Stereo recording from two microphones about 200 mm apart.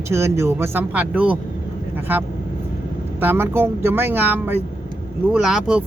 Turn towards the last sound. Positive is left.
turn(degrees=-5)  # may be behind; listen again after turning